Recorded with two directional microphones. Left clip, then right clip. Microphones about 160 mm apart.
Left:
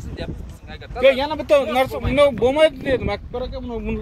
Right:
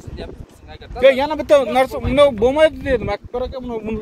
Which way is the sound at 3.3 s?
45° right (ahead or behind).